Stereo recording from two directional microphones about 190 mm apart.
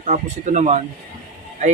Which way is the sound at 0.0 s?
40° right (ahead or behind).